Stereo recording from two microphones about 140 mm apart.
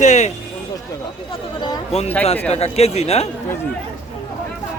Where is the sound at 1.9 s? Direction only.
45° left (ahead or behind).